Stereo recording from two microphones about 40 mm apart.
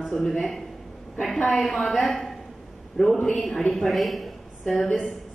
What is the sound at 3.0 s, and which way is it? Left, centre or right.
Speech, centre.